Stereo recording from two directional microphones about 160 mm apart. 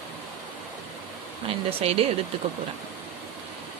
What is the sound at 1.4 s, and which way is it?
Speech, 40° right (ahead or behind).